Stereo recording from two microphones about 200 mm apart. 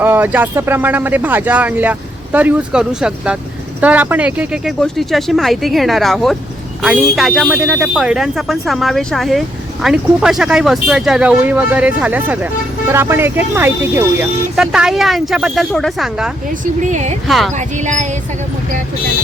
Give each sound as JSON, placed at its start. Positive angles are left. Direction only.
{"t": 0.0, "sound": "speech", "side_deg": -10}
{"t": 16.8, "sound": "a woman's voice", "side_deg": -35}
{"t": 17.2, "sound": "speech", "side_deg": 0}
{"t": 17.7, "sound": "a woman's voice", "side_deg": -35}